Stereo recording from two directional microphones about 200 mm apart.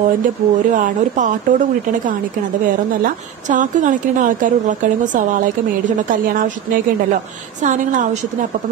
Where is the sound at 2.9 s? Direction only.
40° right (ahead or behind).